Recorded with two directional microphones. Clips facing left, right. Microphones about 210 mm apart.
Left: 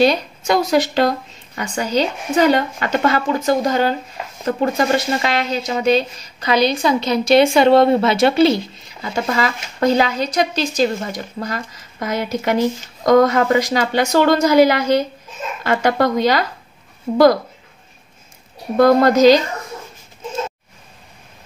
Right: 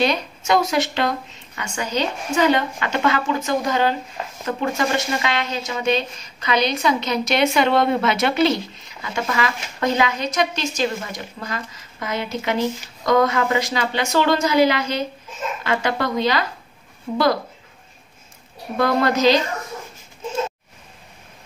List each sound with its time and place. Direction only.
0.5 s speech: 35° left (ahead or behind)
17.1 s speech: 30° left (ahead or behind)
18.8 s speech: 40° left (ahead or behind)